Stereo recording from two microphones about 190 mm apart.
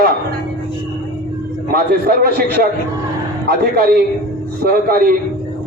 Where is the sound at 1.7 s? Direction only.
55° right (ahead or behind).